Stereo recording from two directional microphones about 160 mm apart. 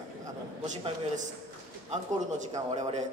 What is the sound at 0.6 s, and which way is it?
Speech, 50° right (ahead or behind).